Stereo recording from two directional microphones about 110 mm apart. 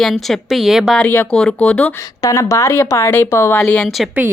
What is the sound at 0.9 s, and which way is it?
Speech, 15° left (ahead or behind).